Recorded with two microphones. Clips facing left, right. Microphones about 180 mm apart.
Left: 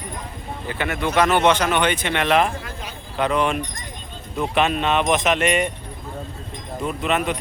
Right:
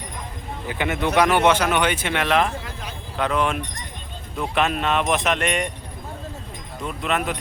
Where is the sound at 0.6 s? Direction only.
15° right (ahead or behind); by 5.7 s 5° left (ahead or behind).